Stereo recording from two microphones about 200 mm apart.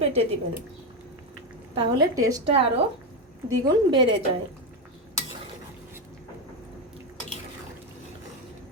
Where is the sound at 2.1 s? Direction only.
15° right (ahead or behind).